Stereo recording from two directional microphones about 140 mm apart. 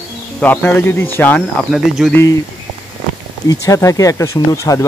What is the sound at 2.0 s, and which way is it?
Speech, centre (ahead or behind).